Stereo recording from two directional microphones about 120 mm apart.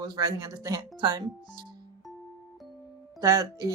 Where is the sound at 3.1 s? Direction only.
30° right (ahead or behind).